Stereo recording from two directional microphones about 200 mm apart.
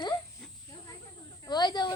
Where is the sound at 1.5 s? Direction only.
20° left (ahead or behind).